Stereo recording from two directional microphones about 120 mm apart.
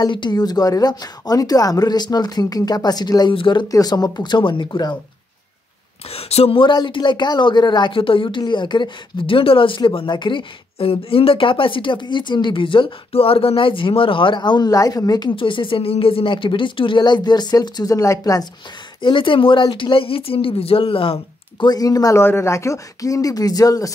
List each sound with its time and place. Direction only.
0.0 s a woman's voice: 40° left (ahead or behind)
3.6 s a woman's voice: 30° left (ahead or behind)
6.1 s speech: 55° left (ahead or behind); by 18.5 s 30° left (ahead or behind)
18.9 s speech: 45° left (ahead or behind)
21.6 s speech: 30° left (ahead or behind)